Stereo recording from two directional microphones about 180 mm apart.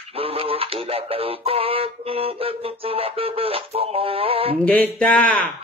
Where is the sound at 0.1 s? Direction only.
30° right (ahead or behind).